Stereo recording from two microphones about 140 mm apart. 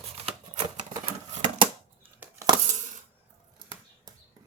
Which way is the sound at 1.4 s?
35° right (ahead or behind).